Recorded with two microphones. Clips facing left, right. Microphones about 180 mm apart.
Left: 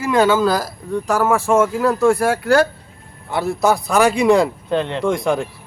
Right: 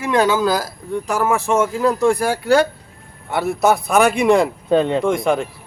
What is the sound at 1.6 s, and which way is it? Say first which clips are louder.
Speech: even; 15° right (ahead or behind).